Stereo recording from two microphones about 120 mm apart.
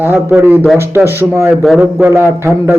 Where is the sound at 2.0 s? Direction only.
15° right (ahead or behind).